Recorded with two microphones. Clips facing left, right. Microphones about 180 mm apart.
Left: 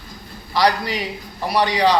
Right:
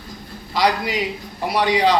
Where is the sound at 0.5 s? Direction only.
20° right (ahead or behind).